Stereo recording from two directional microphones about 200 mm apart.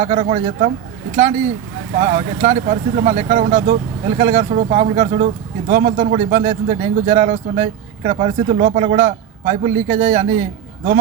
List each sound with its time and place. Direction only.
0.0 s speech: 40° right (ahead or behind)